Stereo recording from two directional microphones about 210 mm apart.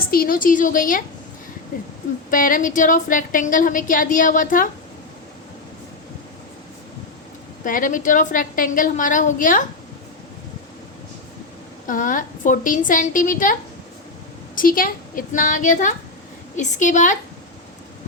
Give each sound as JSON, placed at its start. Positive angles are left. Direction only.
{"t": 0.1, "sound": "a woman's voice", "side_deg": 45}
{"t": 2.3, "sound": "a woman's voice", "side_deg": 40}
{"t": 7.6, "sound": "a woman's voice", "side_deg": 40}
{"t": 11.9, "sound": "a woman's voice", "side_deg": 40}